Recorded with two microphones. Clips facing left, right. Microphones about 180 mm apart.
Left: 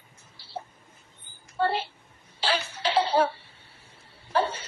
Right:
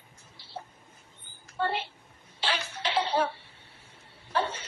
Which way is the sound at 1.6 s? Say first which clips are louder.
Left 4 dB; 35° left (ahead or behind).